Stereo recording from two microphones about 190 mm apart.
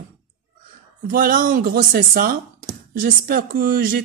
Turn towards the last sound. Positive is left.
turn(degrees=-50)  # may be behind; listen again after turning